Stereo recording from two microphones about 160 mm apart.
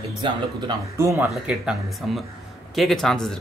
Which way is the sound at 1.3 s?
Centre (ahead or behind).